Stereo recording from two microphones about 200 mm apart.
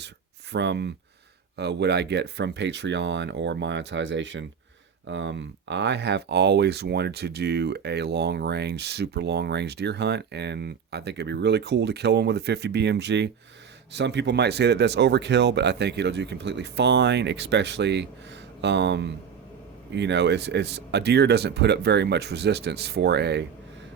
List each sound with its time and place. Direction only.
0.5 s speech: 60° right (ahead or behind)